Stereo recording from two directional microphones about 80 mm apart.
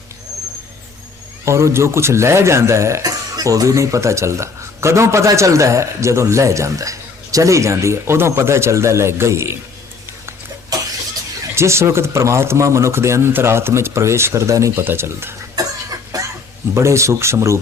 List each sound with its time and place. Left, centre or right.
1.5 s a man's voice: right
3.3 s a man's voice: right
11.5 s a man's voice: right
16.1 s a sound: right
16.7 s a man's voice: right